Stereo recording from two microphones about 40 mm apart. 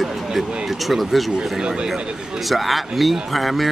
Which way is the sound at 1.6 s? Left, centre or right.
Right.